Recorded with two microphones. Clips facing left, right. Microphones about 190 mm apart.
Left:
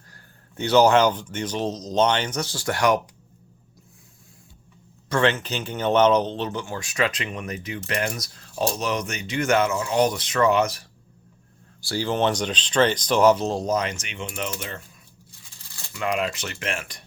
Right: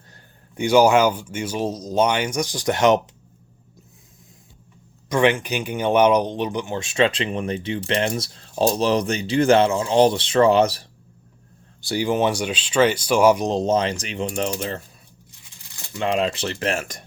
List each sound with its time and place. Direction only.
0.1 s speech: 15° right (ahead or behind)
5.0 s speech: 15° right (ahead or behind); by 10.8 s 30° right (ahead or behind)
11.8 s speech: 15° right (ahead or behind); by 14.5 s 35° right (ahead or behind)
15.9 s speech: 30° right (ahead or behind)